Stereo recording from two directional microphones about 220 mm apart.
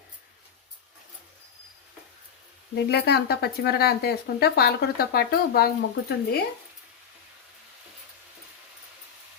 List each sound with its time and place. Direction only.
2.9 s speech: 45° left (ahead or behind)